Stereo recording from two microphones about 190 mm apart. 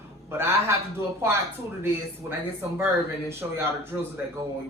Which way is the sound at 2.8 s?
15° right (ahead or behind).